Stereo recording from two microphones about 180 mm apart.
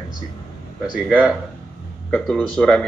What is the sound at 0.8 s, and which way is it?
Speech, 5° right (ahead or behind).